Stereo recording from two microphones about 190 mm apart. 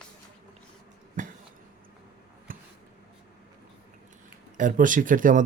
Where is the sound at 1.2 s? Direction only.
45° right (ahead or behind).